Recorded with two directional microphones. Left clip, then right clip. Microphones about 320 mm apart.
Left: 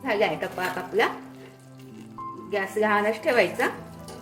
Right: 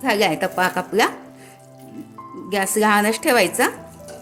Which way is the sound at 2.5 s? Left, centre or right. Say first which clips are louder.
Right 6 dB; right.